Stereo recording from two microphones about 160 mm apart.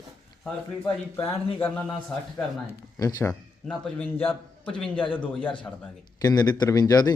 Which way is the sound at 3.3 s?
5° left (ahead or behind).